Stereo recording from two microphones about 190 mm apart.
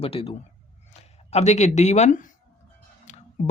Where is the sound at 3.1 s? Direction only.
40° left (ahead or behind).